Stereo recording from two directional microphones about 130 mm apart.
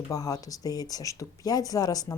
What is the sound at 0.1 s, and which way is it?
Speech, 25° left (ahead or behind).